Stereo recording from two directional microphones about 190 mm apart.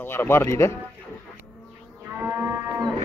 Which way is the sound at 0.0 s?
10° left (ahead or behind).